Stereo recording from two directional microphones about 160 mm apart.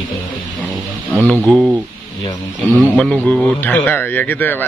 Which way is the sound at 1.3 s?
Centre (ahead or behind).